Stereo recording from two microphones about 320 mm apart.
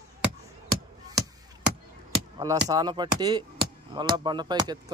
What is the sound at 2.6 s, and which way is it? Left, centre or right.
Speech, centre.